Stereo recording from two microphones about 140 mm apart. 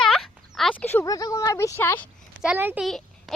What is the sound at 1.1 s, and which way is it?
Speech, 25° left (ahead or behind).